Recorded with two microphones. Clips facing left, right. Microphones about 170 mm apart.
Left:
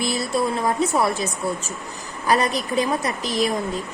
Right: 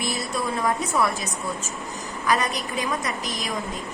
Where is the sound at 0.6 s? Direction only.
30° left (ahead or behind).